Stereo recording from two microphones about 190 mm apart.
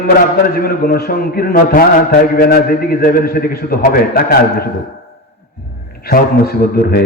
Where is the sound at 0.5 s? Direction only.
50° left (ahead or behind).